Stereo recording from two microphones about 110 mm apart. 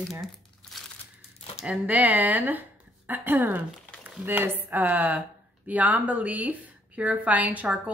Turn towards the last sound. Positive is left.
turn(degrees=-15)  # may be behind; listen again after turning